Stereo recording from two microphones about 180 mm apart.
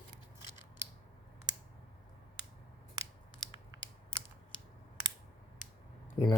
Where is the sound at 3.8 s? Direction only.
90° right.